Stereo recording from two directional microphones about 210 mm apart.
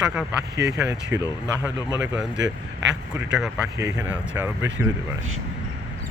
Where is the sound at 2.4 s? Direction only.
60° right (ahead or behind).